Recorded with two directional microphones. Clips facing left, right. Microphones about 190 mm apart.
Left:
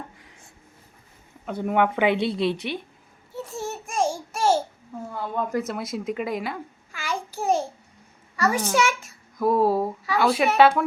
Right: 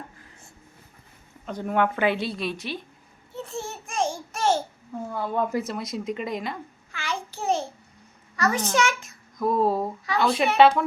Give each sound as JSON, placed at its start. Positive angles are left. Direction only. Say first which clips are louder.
{"t": 1.5, "sound": "a woman's voice", "louder": "left 2 dB", "side_deg": 10}
{"t": 3.3, "sound": "a sound", "louder": "left 2 dB", "side_deg": 10}
{"t": 5.5, "sound": "a child's voice", "louder": "left 1 dB", "side_deg": 0}